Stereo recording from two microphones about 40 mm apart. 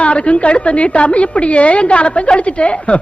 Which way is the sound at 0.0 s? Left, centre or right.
Left.